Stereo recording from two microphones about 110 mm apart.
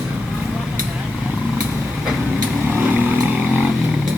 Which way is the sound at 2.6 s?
15° right (ahead or behind).